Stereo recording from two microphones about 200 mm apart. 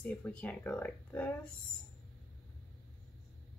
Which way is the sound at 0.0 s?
5° left (ahead or behind).